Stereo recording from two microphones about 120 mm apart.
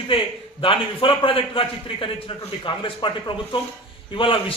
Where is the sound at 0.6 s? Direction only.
45° left (ahead or behind).